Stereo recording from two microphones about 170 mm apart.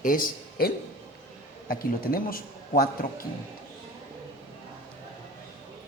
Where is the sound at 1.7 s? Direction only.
55° left (ahead or behind).